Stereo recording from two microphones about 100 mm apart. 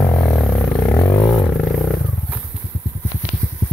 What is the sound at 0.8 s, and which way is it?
Music, 35° left (ahead or behind).